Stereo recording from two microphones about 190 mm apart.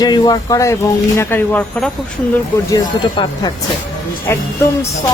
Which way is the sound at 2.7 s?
20° left (ahead or behind).